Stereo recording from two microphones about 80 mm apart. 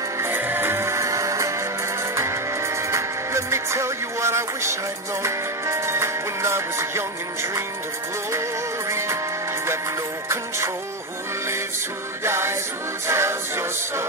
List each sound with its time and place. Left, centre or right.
0.2 s music: right
10.2 s music: right
12.2 s music: right